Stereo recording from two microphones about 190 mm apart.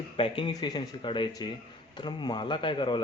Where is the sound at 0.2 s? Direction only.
25° left (ahead or behind).